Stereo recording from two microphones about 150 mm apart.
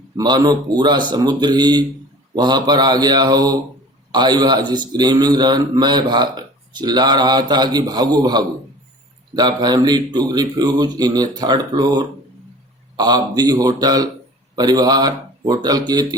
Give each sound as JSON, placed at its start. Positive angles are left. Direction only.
{"t": 0.2, "sound": "a man's voice", "side_deg": -25}